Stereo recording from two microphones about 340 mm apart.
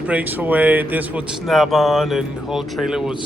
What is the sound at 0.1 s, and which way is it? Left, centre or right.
A man's voice, centre.